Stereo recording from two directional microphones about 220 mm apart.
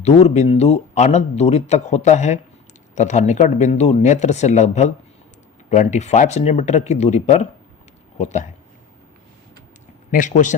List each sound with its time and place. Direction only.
0.0 s speech: 30° left (ahead or behind)
10.1 s speech: 35° left (ahead or behind)